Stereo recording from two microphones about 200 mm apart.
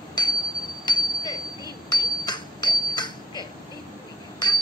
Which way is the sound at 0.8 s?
20° left (ahead or behind).